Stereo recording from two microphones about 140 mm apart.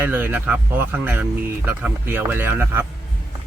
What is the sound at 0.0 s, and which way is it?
Speech, 15° right (ahead or behind).